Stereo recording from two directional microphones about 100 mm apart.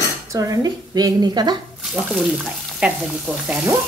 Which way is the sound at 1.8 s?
10° right (ahead or behind).